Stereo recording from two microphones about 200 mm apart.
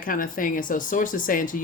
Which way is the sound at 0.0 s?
45° left (ahead or behind).